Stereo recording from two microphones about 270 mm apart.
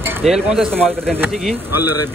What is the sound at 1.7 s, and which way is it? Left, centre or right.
Speech, left.